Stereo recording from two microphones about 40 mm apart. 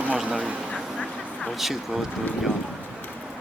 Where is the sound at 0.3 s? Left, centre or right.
Right.